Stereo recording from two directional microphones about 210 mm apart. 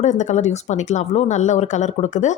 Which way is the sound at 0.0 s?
35° left (ahead or behind).